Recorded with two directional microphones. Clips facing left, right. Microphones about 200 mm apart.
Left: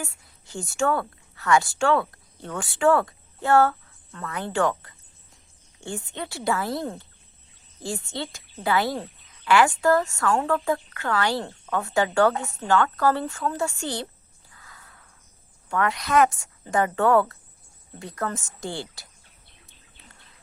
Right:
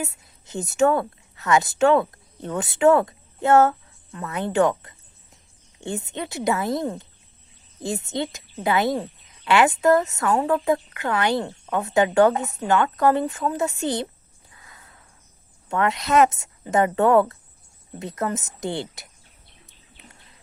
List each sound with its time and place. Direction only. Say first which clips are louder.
0.0 s a woman's voice: right 5 dB; 20° right (ahead or behind)
14.5 s a sound: even; 20° right (ahead or behind)
15.7 s a woman's voice: right 2 dB; 25° right (ahead or behind)